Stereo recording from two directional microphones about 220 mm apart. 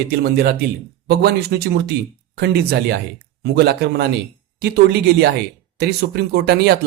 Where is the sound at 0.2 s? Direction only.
45° right (ahead or behind).